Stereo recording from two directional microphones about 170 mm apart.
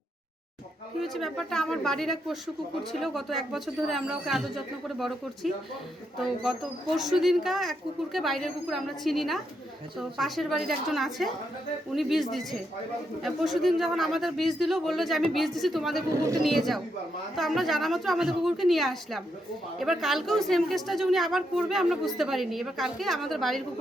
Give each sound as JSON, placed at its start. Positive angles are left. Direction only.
{"t": 1.0, "sound": "a woman's voice", "side_deg": 0}
{"t": 16.0, "sound": "speech", "side_deg": -20}
{"t": 16.4, "sound": "a woman's voice", "side_deg": 0}